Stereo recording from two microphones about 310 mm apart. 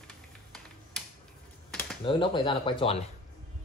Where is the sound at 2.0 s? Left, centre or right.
Centre.